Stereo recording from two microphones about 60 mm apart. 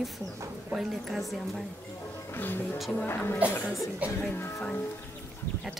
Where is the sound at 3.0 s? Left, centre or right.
Left.